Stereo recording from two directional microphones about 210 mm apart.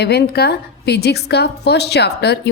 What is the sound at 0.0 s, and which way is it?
A woman's voice, 50° left (ahead or behind).